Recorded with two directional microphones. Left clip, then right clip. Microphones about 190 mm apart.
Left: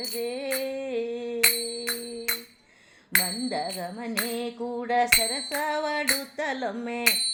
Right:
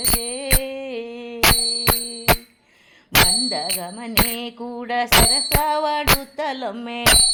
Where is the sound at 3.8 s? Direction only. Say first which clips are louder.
Right 8 dB; 20° right (ahead or behind).